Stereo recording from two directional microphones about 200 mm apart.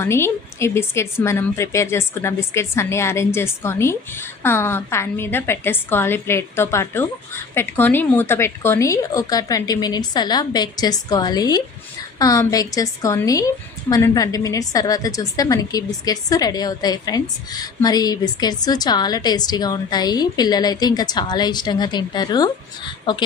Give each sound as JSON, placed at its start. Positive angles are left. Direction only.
{"t": 0.0, "sound": "a woman's voice", "side_deg": 15}